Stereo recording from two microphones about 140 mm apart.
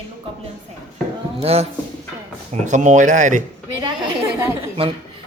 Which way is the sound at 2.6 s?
60° right (ahead or behind).